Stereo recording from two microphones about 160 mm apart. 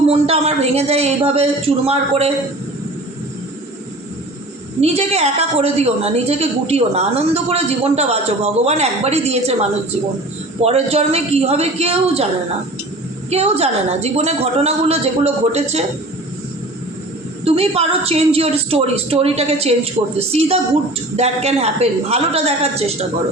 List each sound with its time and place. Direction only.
0.1 s a woman's voice: 40° right (ahead or behind)
4.8 s a woman's voice: 40° right (ahead or behind)
10.6 s a woman's voice: 40° right (ahead or behind)
13.3 s a woman's voice: 40° right (ahead or behind)
17.4 s a woman's voice: 40° right (ahead or behind)